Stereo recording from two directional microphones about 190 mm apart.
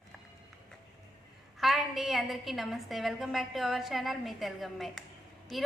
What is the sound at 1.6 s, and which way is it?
A woman's voice, centre (ahead or behind).